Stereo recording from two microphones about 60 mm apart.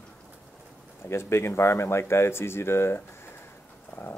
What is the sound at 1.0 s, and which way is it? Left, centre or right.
Speech, left.